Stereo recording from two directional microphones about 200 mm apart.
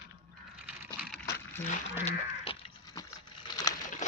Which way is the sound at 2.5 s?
25° left (ahead or behind).